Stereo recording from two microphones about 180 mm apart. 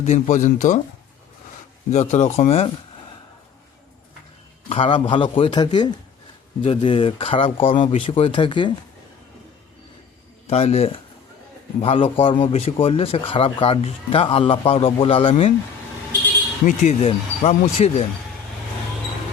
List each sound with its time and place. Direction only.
0.0 s speech: 40° left (ahead or behind)
1.9 s a man's voice: 40° left (ahead or behind)
4.7 s a man's voice: 30° left (ahead or behind)
10.4 s a man's voice: 35° left (ahead or behind)
16.6 s a man's voice: 40° left (ahead or behind)